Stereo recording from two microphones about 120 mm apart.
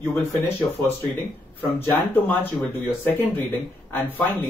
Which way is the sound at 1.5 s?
15° left (ahead or behind).